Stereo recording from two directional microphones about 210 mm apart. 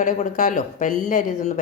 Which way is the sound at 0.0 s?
35° left (ahead or behind).